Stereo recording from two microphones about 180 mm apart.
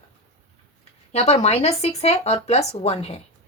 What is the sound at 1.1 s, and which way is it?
Speech, 35° left (ahead or behind).